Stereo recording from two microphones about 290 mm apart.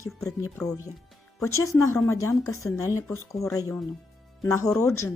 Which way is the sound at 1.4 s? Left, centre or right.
Centre.